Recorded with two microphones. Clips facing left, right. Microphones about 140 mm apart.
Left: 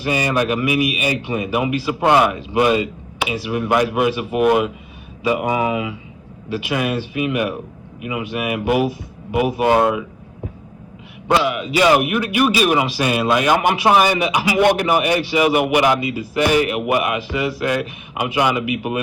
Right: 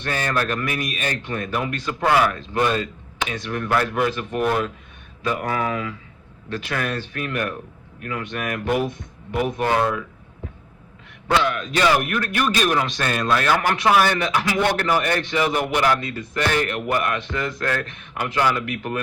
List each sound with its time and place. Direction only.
0.0 s a man's voice: 10° left (ahead or behind)
2.0 s a man's voice: 20° left (ahead or behind)
2.3 s a man's voice: 10° left (ahead or behind)
11.4 s a man's voice: 10° left (ahead or behind)